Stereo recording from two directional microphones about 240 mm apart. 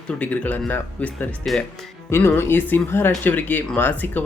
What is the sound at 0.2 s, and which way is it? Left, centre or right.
Speech, centre.